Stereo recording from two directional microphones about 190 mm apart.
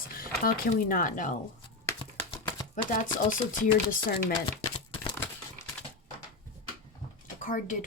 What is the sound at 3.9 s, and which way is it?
Speech, 45° left (ahead or behind).